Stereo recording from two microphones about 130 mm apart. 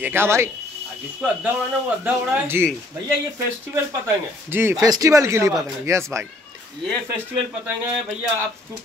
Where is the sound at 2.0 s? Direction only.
15° right (ahead or behind).